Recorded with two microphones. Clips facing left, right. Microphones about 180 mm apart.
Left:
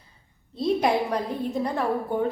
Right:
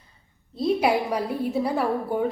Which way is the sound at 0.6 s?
10° right (ahead or behind).